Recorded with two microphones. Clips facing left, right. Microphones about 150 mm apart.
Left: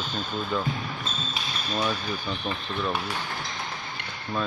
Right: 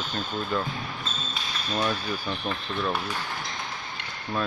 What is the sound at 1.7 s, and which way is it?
Speech, centre (ahead or behind).